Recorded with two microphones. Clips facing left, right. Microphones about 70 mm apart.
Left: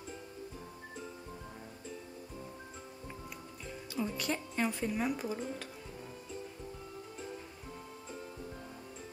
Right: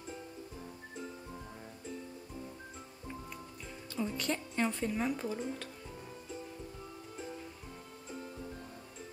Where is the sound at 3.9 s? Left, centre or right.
Centre.